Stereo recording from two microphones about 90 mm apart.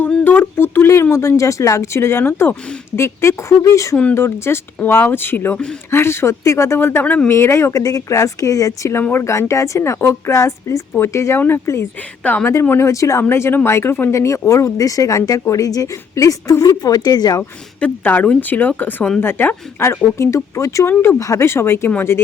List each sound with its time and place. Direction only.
0.3 s a sound: 25° left (ahead or behind)
1.1 s speech: 35° left (ahead or behind)
12.2 s speech: 15° left (ahead or behind)
12.6 s speech: 30° left (ahead or behind); by 17.4 s 45° left (ahead or behind)
17.7 s speech: 15° left (ahead or behind)